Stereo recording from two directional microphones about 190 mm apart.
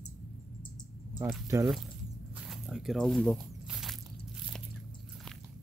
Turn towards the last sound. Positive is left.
turn(degrees=0)  # may be behind; listen again after turning